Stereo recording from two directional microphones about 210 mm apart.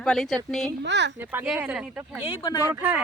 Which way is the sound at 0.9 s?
55° right (ahead or behind).